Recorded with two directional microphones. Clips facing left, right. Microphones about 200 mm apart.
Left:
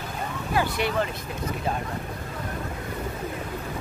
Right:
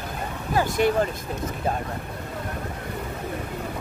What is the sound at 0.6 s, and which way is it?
Speech, 45° right (ahead or behind).